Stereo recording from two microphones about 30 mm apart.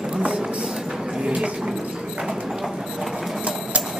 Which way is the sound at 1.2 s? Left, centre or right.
Right.